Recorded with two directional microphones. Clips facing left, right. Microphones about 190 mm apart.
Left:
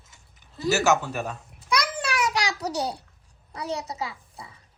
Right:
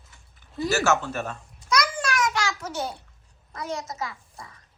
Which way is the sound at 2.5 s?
40° left (ahead or behind).